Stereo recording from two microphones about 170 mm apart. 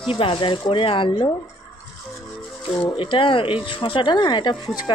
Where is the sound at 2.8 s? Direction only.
30° left (ahead or behind).